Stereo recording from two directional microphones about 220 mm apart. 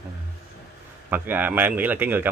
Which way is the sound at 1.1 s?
10° right (ahead or behind).